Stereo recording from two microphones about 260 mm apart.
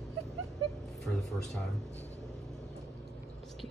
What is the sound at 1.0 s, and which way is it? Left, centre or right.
Speech, centre.